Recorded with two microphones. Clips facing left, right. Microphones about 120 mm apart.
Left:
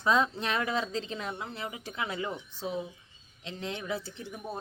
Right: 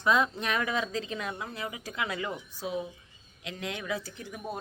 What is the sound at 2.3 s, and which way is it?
Speech, 10° right (ahead or behind).